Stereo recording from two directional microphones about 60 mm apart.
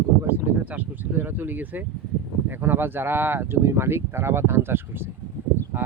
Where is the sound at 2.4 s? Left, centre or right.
Right.